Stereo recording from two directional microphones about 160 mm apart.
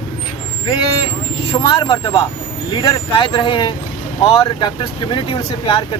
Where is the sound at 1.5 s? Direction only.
25° left (ahead or behind).